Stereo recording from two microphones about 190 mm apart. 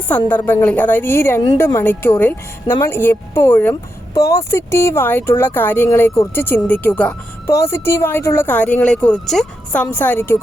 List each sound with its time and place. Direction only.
0.3 s a woman's voice: 10° left (ahead or behind)